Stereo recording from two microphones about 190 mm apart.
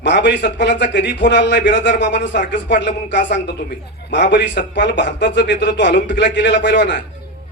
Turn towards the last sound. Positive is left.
turn(degrees=65)  # may be behind; listen again after turning